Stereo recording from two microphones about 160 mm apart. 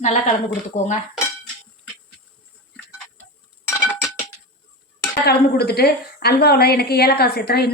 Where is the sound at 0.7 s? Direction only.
50° left (ahead or behind).